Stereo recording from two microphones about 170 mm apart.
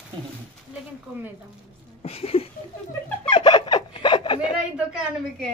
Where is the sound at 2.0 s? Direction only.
35° left (ahead or behind).